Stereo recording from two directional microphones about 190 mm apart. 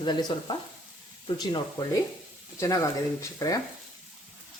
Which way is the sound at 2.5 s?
15° left (ahead or behind).